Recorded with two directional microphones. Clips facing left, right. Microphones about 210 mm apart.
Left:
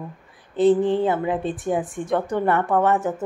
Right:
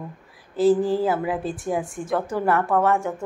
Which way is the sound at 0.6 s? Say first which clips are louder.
Left 1 dB; centre (ahead or behind).